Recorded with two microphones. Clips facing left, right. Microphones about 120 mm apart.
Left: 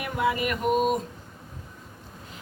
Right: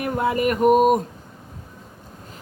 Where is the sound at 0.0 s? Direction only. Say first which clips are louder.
Right 5 dB; 45° right (ahead or behind).